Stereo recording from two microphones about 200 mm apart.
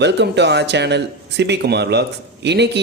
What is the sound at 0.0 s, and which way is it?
A man's voice, 60° right (ahead or behind).